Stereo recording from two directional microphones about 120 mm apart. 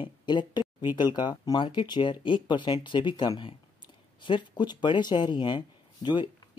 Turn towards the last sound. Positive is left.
turn(degrees=40)  # may be behind; listen again after turning